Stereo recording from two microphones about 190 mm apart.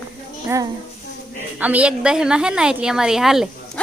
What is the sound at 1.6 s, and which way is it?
A woman's voice, 10° right (ahead or behind).